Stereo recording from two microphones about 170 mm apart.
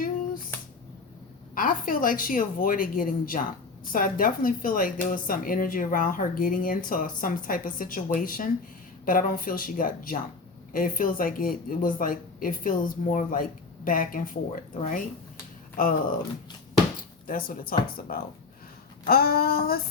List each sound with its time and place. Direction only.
1.5 s speech: 55° left (ahead or behind)
17.2 s speech: 55° left (ahead or behind)